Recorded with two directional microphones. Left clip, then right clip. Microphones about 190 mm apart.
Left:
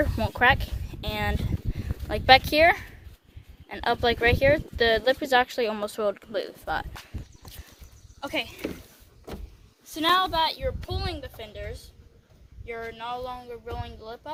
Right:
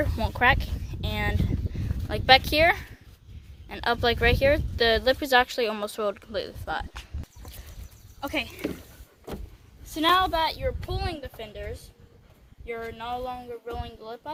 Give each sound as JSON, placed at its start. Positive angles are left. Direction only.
{"t": 0.0, "sound": "speech", "side_deg": 0}
{"t": 8.2, "sound": "speech", "side_deg": 15}
{"t": 9.9, "sound": "speech", "side_deg": 0}
{"t": 12.9, "sound": "speech", "side_deg": 15}